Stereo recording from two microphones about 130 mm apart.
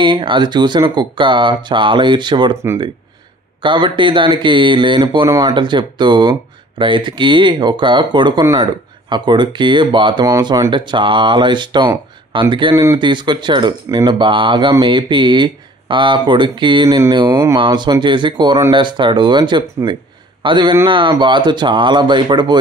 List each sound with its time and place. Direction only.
0.0 s speech: 35° right (ahead or behind)
3.6 s speech: 40° right (ahead or behind)
17.6 s speech: 35° right (ahead or behind)